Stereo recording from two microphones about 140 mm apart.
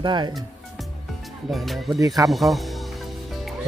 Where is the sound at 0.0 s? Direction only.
30° right (ahead or behind).